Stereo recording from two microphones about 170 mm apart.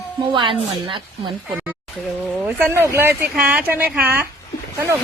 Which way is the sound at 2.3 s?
10° right (ahead or behind).